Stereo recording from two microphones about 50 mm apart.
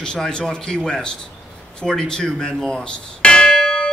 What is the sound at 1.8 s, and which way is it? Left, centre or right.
Church bell, centre.